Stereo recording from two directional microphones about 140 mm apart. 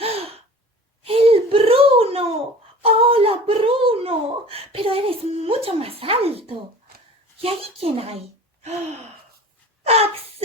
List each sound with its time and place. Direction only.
0.0 s gasp: 45° right (ahead or behind)
1.0 s a sound: 45° right (ahead or behind)
7.3 s speech: 45° right (ahead or behind)
9.8 s speech: 45° right (ahead or behind)